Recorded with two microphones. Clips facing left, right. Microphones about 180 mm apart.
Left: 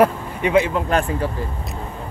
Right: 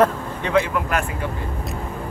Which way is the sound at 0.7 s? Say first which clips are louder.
Left 3 dB; 30° left (ahead or behind).